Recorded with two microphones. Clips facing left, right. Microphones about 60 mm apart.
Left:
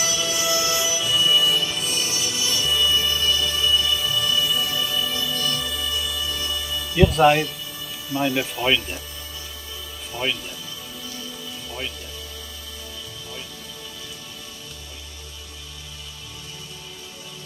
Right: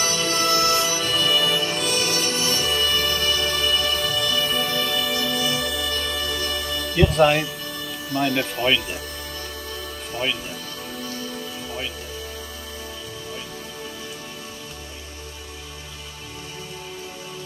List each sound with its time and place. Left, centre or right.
0.0 s music: right
1.8 s music: right
5.6 s music: right
7.0 s speech: centre